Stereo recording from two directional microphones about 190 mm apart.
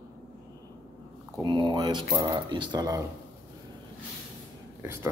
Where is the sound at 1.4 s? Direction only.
25° right (ahead or behind).